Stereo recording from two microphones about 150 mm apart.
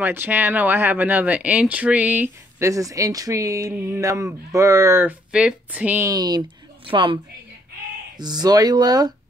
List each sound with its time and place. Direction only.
0.0 s speech: 15° right (ahead or behind)
6.0 s speech: 25° right (ahead or behind)
8.2 s speech: 25° right (ahead or behind)